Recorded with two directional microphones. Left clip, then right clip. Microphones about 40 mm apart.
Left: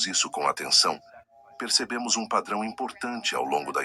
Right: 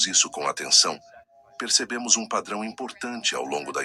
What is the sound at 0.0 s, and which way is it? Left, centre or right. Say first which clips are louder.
Speech: right 2 dB; right.